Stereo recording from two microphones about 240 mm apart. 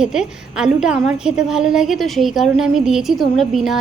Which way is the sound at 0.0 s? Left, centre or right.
Centre.